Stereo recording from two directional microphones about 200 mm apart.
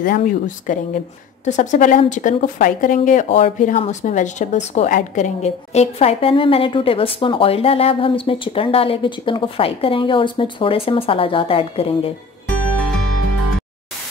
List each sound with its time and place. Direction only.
0.0 s speech: 40° left (ahead or behind)